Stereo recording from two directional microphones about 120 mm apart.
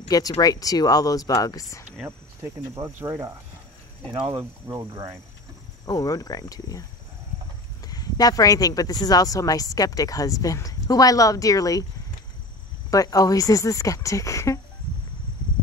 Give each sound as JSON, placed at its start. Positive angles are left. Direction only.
{"t": 0.1, "sound": "speech", "side_deg": 30}
{"t": 2.0, "sound": "cricket", "side_deg": -25}
{"t": 4.6, "sound": "cricket", "side_deg": -25}
{"t": 5.9, "sound": "speech", "side_deg": 30}
{"t": 7.8, "sound": "speech", "side_deg": 30}
{"t": 12.9, "sound": "speech", "side_deg": 30}